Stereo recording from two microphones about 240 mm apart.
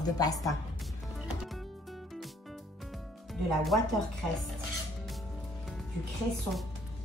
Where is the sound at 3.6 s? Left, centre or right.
Centre.